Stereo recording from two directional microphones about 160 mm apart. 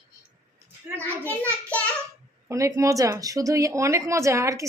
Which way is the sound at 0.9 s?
10° left (ahead or behind).